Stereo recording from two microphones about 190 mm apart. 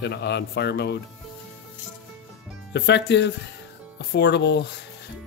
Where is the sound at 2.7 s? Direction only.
65° left (ahead or behind).